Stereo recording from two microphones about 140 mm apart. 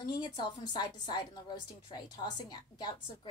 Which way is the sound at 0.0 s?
30° left (ahead or behind).